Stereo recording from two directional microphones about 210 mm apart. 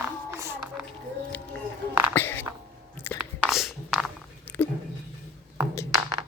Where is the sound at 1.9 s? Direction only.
10° right (ahead or behind).